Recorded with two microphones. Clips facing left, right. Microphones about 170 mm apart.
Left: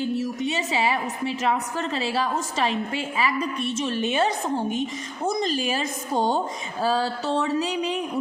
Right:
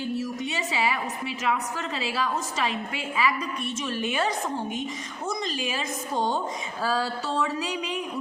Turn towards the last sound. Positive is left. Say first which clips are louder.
# left 5 dB
turn(degrees=25)  # may be behind; listen again after turning